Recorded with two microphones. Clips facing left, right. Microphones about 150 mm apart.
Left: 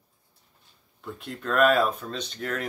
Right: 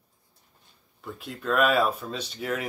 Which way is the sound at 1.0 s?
Centre (ahead or behind).